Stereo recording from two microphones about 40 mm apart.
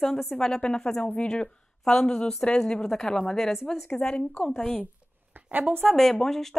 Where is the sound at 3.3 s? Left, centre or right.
Centre.